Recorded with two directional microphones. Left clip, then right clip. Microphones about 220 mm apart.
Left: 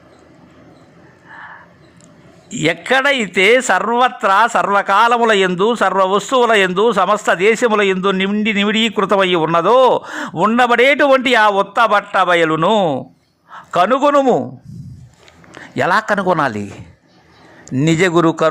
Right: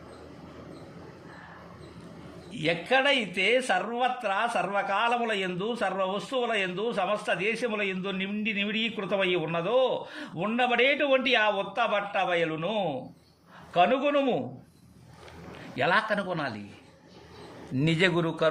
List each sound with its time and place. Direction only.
2.6 s a man's voice: 35° left (ahead or behind)
15.7 s a man's voice: 30° left (ahead or behind)
17.7 s a man's voice: 30° left (ahead or behind)